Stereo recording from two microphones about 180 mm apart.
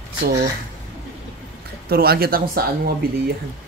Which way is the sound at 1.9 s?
60° right (ahead or behind).